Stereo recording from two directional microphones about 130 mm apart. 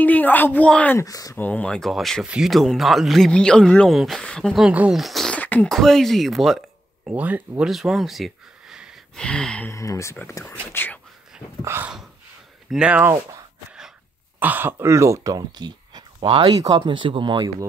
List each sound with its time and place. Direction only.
0.0 s a woman's voice: 10° left (ahead or behind)
0.9 s speech: 25° left (ahead or behind)
1.3 s speech: 10° left (ahead or behind)
7.1 s speech: 10° right (ahead or behind)
9.2 s a woman's voice: 5° left (ahead or behind)
9.7 s a woman's voice: 25° left (ahead or behind)
11.6 s dog: 20° right (ahead or behind)
12.7 s speech: 10° right (ahead or behind)
14.4 s speech: 15° right (ahead or behind); by 17.5 s 40° right (ahead or behind)